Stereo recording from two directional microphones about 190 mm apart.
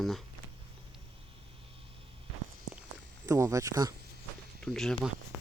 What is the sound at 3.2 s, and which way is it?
Speech, 15° right (ahead or behind).